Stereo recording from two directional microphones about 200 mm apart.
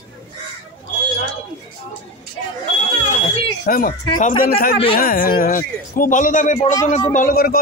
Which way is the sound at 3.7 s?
45° left (ahead or behind).